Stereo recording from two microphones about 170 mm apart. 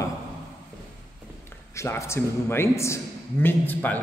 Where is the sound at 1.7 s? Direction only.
15° left (ahead or behind).